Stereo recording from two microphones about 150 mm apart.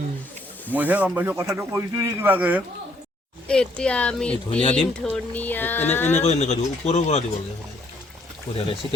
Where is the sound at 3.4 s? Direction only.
5° left (ahead or behind).